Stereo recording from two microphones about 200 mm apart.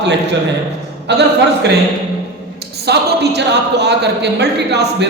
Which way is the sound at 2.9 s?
55° right (ahead or behind).